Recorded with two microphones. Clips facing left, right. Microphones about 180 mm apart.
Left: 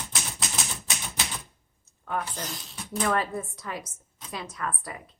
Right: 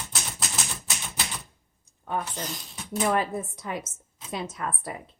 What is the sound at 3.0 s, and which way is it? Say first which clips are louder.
A woman's voice: right 2 dB; 20° right (ahead or behind).